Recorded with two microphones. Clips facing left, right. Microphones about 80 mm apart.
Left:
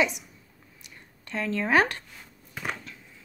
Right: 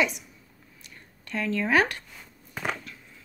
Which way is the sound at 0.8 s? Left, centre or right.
Left.